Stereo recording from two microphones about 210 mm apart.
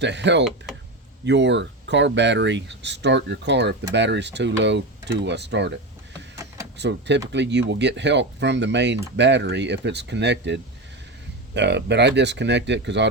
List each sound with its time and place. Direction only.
0.0 s speech: 55° right (ahead or behind)
6.3 s a sound: 15° right (ahead or behind)
6.7 s speech: 55° right (ahead or behind)